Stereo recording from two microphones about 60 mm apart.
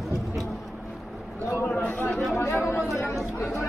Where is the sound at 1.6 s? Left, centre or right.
Left.